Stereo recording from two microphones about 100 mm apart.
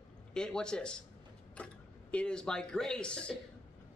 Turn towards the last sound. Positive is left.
turn(degrees=10)  # may be behind; listen again after turning